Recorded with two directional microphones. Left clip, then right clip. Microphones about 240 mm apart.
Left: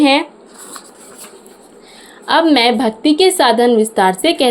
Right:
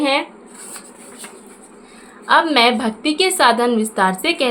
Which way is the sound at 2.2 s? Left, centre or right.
Left.